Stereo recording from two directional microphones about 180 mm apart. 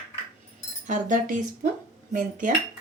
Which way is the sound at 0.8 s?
45° right (ahead or behind).